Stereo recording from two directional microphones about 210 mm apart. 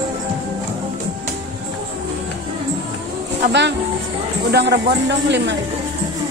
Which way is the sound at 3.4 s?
55° right (ahead or behind).